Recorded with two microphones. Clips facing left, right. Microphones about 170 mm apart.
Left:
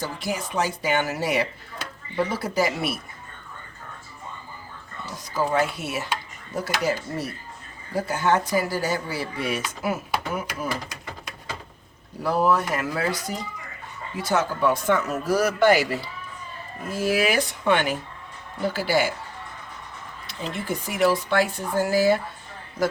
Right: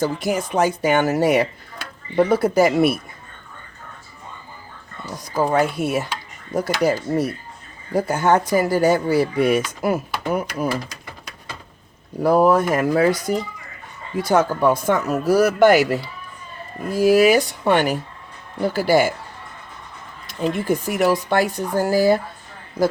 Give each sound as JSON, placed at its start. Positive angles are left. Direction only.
{"t": 0.0, "sound": "speech", "side_deg": -50}
{"t": 5.3, "sound": "speech", "side_deg": -45}
{"t": 12.2, "sound": "speech", "side_deg": -45}
{"t": 20.2, "sound": "speech", "side_deg": -45}